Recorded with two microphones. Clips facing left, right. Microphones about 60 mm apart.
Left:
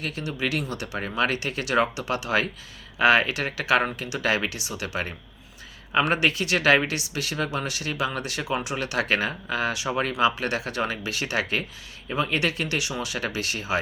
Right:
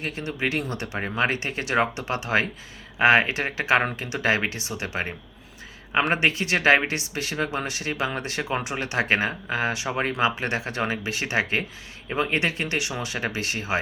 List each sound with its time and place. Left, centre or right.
0.0 s speech: right